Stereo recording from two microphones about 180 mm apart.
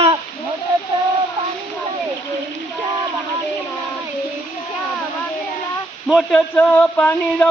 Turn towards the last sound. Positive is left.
turn(degrees=10)  # may be behind; listen again after turning